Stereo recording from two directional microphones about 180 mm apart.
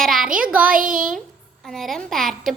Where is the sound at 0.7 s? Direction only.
50° right (ahead or behind).